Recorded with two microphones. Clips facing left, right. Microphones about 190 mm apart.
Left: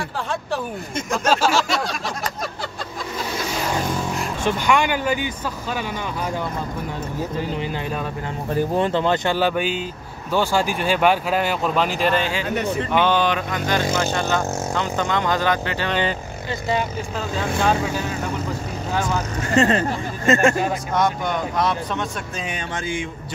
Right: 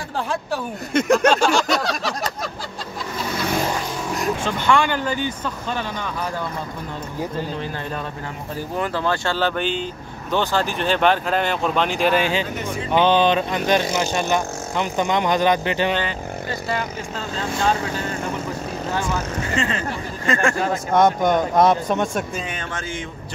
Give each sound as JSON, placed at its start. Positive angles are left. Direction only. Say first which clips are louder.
{"t": 0.9, "sound": "speech", "louder": "right 8 dB", "side_deg": -65}
{"t": 1.3, "sound": "a sound", "louder": "right 1 dB", "side_deg": 5}
{"t": 4.5, "sound": "speech", "louder": "left 2 dB", "side_deg": 15}
{"t": 7.5, "sound": "speech", "louder": "left 2 dB", "side_deg": 15}
{"t": 12.2, "sound": "speech", "louder": "right 1 dB", "side_deg": -20}
{"t": 19.5, "sound": "speech", "louder": "left 8 dB", "side_deg": 40}
{"t": 20.2, "sound": "speech", "louder": "left 3 dB", "side_deg": 25}
{"t": 20.9, "sound": "speech", "louder": "right 8 dB", "side_deg": -50}
{"t": 22.8, "sound": "speech", "louder": "left 3 dB", "side_deg": 15}